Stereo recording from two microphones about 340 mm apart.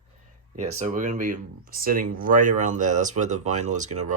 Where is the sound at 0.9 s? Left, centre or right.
Right.